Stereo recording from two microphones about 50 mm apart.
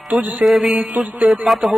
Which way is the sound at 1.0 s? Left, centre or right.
Right.